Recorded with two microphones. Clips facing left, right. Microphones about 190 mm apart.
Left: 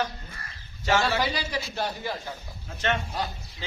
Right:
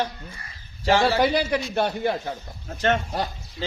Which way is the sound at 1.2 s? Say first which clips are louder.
Right 7 dB; 55° right (ahead or behind).